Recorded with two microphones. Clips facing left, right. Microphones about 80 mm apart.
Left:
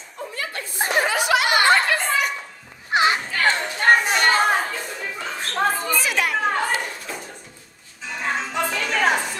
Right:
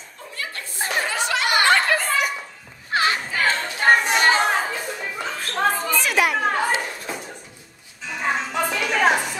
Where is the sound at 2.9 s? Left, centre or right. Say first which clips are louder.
Left 2 dB; left.